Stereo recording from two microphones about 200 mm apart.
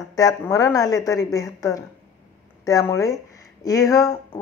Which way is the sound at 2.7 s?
15° left (ahead or behind).